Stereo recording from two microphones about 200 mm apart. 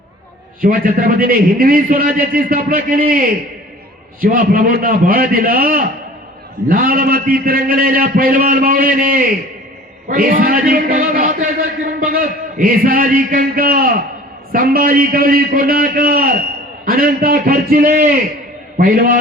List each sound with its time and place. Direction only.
0.6 s a man's voice: 45° right (ahead or behind)